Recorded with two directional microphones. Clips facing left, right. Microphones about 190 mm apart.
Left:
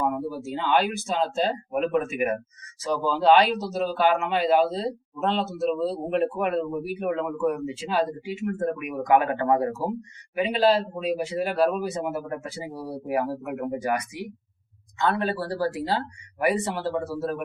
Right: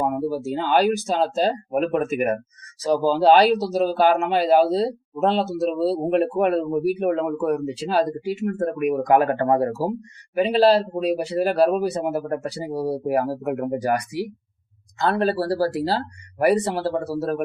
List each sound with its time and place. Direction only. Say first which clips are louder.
0.3 s speech: right 4 dB; 40° right (ahead or behind)